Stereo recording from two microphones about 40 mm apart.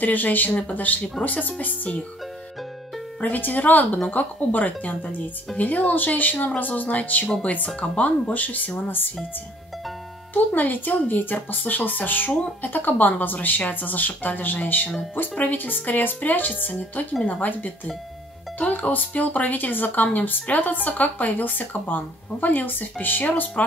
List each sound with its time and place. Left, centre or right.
0.0 s speech: left
0.5 s speech: left
3.2 s speech: left
10.3 s speech: left